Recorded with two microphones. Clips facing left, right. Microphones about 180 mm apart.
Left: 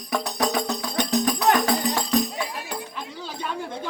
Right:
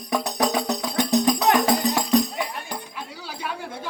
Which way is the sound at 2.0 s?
10° right (ahead or behind).